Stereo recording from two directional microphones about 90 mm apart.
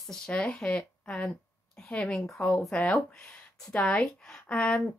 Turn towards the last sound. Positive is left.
turn(degrees=15)  # may be behind; listen again after turning